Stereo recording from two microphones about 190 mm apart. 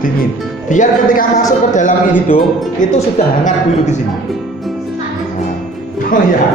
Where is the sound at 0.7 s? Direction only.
45° left (ahead or behind).